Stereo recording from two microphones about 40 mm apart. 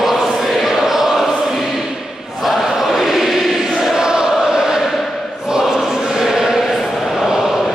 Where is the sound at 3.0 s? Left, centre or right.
Centre.